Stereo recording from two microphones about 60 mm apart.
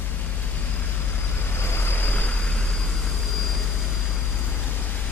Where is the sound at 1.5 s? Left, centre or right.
Left; by 2.8 s centre.